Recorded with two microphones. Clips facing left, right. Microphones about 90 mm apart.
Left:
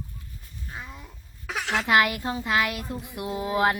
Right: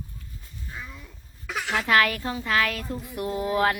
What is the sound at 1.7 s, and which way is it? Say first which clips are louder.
Child singing: even; 20° left (ahead or behind).